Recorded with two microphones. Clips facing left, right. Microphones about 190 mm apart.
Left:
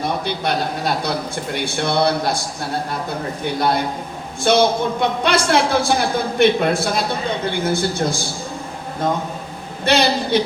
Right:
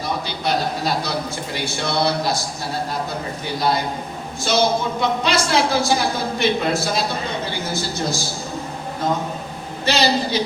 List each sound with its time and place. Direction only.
0.3 s a woman's voice: 55° left (ahead or behind)
3.4 s a woman's voice: 55° left (ahead or behind)
9.8 s a woman's voice: 55° left (ahead or behind)